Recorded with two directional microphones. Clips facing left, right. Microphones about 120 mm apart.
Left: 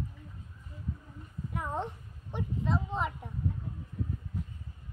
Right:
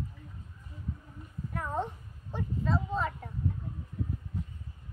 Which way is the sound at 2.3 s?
20° left (ahead or behind).